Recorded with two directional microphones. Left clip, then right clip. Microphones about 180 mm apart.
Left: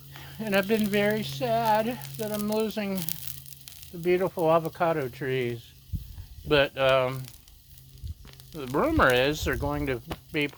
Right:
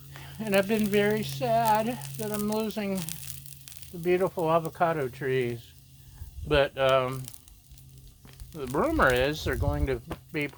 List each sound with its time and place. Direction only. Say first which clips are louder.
0.2 s speech: right 1 dB; 45° left (ahead or behind)
3.0 s crumpling: left 1 dB; centre (ahead or behind)
4.0 s speech: left 2 dB; 45° left (ahead or behind)
8.5 s speech: left 1 dB; 50° left (ahead or behind)